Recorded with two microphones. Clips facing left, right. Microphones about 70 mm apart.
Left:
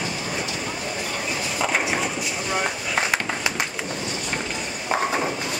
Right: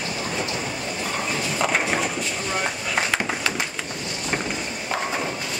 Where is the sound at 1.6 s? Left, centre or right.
Centre.